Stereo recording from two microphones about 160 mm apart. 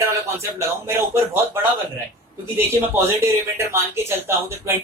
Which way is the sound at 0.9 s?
15° right (ahead or behind).